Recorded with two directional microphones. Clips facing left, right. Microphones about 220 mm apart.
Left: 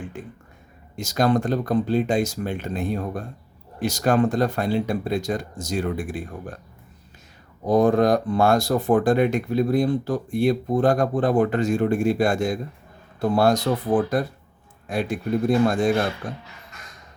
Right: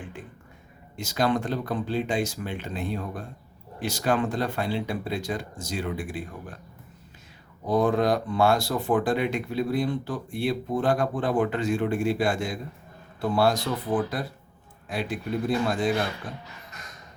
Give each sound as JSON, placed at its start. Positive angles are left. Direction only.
{"t": 0.9, "sound": "speech", "side_deg": 45}
{"t": 7.7, "sound": "speech", "side_deg": 45}